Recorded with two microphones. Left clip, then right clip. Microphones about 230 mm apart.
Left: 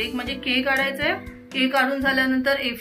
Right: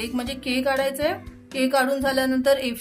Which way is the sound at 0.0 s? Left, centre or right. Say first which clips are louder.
Left 2 dB; right.